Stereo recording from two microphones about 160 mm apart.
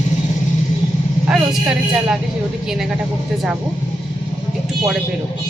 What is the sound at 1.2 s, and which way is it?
A woman's voice, 5° right (ahead or behind).